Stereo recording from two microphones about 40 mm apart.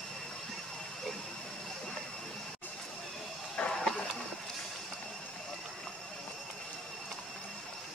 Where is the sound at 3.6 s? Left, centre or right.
Left.